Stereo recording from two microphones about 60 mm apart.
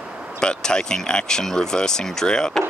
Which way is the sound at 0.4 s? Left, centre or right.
Centre.